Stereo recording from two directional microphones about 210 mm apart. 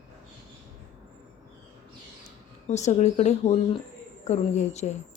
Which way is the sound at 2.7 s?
30° left (ahead or behind).